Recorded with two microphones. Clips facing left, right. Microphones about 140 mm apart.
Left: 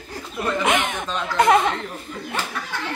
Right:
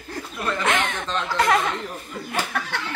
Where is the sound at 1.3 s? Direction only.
25° left (ahead or behind).